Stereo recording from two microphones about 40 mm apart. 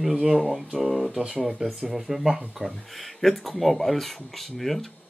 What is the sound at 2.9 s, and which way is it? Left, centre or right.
Speech, centre.